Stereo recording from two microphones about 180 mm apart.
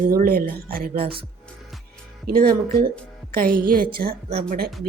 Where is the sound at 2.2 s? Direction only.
55° right (ahead or behind).